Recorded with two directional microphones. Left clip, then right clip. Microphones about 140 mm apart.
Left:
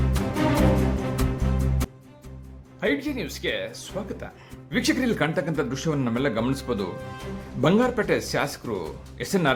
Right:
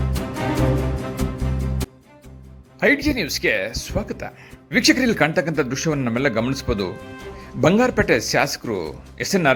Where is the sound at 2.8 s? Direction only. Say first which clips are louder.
Right 8 dB; 40° right (ahead or behind).